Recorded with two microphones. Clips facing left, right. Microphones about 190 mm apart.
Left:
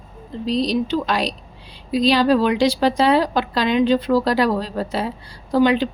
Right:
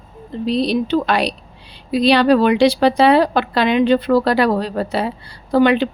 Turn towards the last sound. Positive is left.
turn(degrees=-65)  # may be behind; listen again after turning